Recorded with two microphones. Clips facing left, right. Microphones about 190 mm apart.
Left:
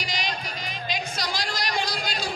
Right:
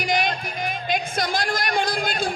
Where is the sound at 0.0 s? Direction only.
55° right (ahead or behind).